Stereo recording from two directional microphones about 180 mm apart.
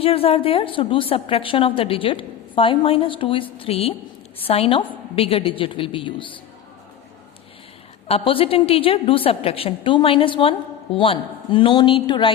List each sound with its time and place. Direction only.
0.0 s a woman's voice: 30° left (ahead or behind)
8.0 s a woman's voice: 30° left (ahead or behind)